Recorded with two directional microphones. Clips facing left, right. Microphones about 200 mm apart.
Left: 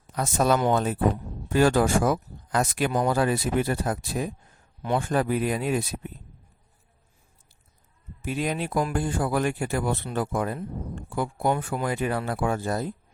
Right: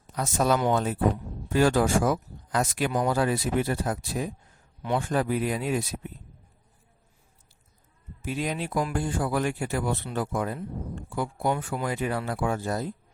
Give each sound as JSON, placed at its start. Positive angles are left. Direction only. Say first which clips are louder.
{"t": 0.2, "sound": "speech", "louder": "left 2 dB", "side_deg": 55}
{"t": 8.2, "sound": "speech", "louder": "left 2 dB", "side_deg": 55}